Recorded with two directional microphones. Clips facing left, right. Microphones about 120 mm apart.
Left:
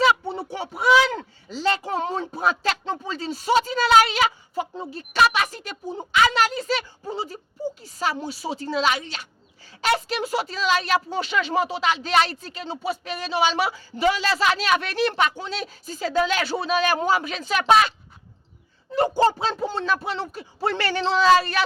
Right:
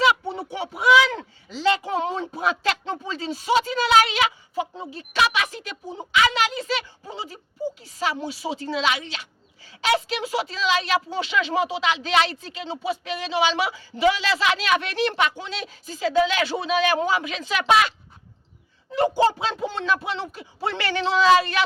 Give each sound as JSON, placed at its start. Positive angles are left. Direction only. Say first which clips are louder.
{"t": 0.3, "sound": "speech", "louder": "even", "side_deg": 40}
{"t": 18.9, "sound": "speech", "louder": "even", "side_deg": 35}